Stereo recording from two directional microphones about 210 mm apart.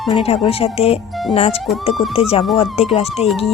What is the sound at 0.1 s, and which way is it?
Speech, 25° left (ahead or behind).